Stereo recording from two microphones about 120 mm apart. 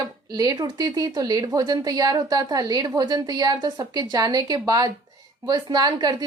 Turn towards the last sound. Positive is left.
turn(degrees=-35)  # may be behind; listen again after turning